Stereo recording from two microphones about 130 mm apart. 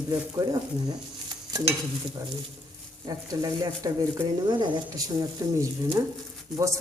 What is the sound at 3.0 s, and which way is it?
Speech, 30° right (ahead or behind).